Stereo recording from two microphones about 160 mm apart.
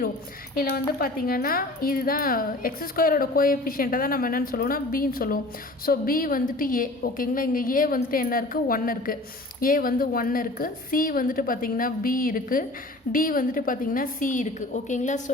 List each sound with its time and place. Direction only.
0.9 s speech: 65° left (ahead or behind); by 15.2 s 50° left (ahead or behind)